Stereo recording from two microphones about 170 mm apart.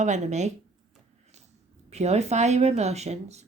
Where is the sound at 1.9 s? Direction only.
40° right (ahead or behind).